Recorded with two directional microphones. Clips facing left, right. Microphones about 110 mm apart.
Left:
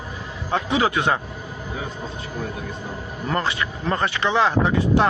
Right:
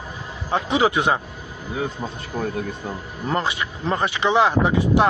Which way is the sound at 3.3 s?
15° right (ahead or behind).